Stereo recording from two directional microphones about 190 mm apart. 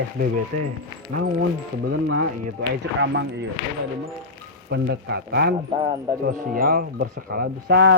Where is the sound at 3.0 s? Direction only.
70° right (ahead or behind).